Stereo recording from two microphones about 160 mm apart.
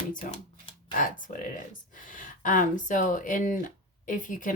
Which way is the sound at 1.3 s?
55° left (ahead or behind).